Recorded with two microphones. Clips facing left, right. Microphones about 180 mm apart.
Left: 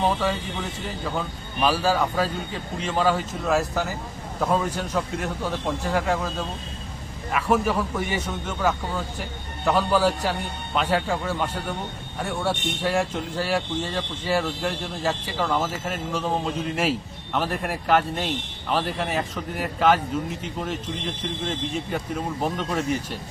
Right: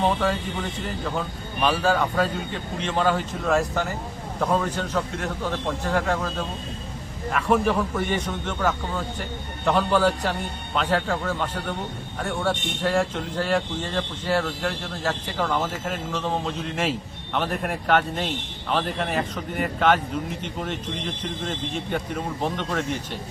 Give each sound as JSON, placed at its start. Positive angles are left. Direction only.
{"t": 0.0, "sound": "speech", "side_deg": 0}